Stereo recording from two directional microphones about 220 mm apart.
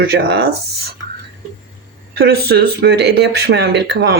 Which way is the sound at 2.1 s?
45° right (ahead or behind).